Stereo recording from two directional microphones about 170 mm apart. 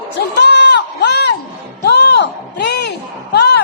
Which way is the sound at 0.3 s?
85° left.